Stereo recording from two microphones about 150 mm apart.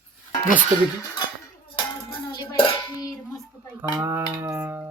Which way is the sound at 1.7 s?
30° left (ahead or behind).